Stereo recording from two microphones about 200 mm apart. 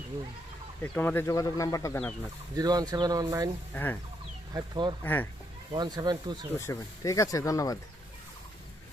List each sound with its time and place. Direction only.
0.8 s speech: 10° left (ahead or behind)
2.0 s speech: 5° left (ahead or behind)
2.6 s speech: 20° right (ahead or behind)
4.5 s speech: 20° right (ahead or behind)
5.0 s speech: 10° left (ahead or behind)
5.7 s speech: 20° right (ahead or behind)
6.6 s speech: 15° left (ahead or behind)